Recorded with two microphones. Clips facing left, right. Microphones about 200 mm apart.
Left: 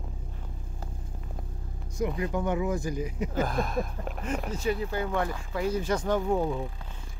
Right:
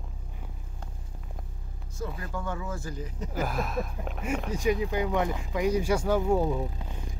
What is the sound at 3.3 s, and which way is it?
Speech, 5° right (ahead or behind).